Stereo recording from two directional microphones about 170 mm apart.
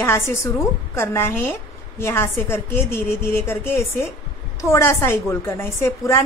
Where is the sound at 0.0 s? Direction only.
15° left (ahead or behind).